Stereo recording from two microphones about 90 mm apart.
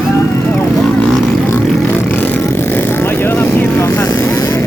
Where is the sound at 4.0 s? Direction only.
40° left (ahead or behind).